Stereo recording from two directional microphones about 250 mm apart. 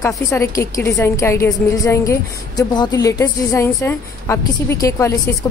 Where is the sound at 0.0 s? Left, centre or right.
Centre.